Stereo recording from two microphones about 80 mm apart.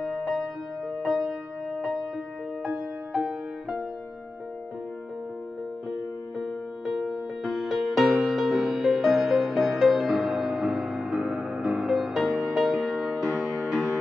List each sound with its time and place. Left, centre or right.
0.0 s music: centre
3.1 s music: centre
5.9 s music: centre